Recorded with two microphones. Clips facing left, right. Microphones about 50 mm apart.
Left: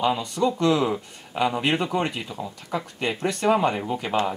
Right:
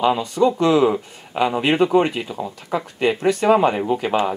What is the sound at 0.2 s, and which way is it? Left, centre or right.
Speech, centre.